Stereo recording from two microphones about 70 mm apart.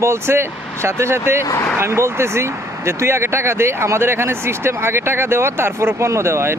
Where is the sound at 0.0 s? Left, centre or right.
Right.